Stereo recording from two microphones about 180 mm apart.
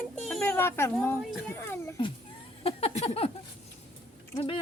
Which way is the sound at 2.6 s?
30° left (ahead or behind).